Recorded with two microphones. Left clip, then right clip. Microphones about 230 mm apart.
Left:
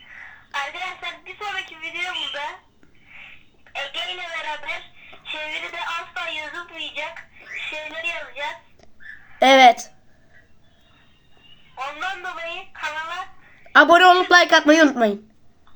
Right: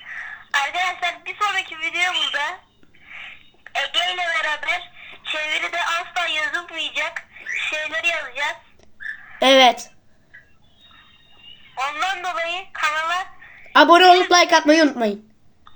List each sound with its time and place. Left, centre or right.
0.1 s a sound: right
3.1 s telephone: right
5.2 s a woman's voice: right
9.4 s speech: centre
11.7 s telephone: right
13.7 s a woman's voice: centre